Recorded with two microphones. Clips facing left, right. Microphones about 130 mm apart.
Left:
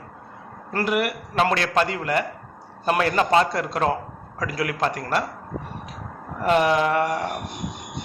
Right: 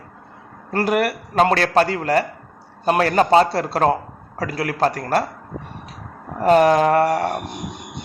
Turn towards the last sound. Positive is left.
turn(degrees=-40)  # may be behind; listen again after turning